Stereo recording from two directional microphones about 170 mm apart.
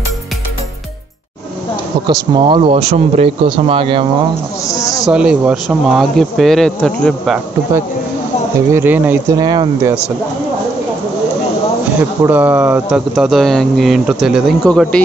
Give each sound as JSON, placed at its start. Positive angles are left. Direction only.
{"t": 2.0, "sound": "speech", "side_deg": -25}
{"t": 4.7, "sound": "speech", "side_deg": 20}
{"t": 5.0, "sound": "speech", "side_deg": -5}
{"t": 8.7, "sound": "speech", "side_deg": -10}
{"t": 9.4, "sound": "speech", "side_deg": -25}
{"t": 12.3, "sound": "speech", "side_deg": -10}